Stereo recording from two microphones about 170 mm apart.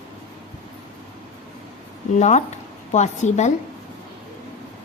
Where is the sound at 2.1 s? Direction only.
45° left (ahead or behind).